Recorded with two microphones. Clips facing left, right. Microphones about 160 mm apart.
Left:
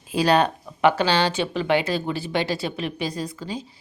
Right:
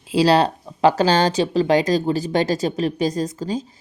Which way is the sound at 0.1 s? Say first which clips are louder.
Right 3 dB; 30° right (ahead or behind).